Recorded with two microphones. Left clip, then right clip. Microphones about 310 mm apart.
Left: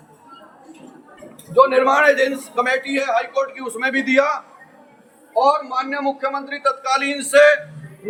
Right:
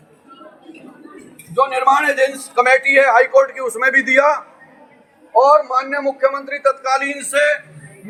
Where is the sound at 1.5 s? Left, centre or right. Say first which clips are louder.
Even; centre.